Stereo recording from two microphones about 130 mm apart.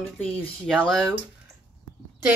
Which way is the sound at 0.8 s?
5° left (ahead or behind).